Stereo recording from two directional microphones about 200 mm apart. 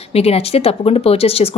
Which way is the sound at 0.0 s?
30° left (ahead or behind).